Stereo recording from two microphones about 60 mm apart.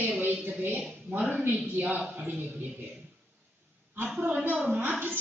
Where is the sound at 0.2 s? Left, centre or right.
Right.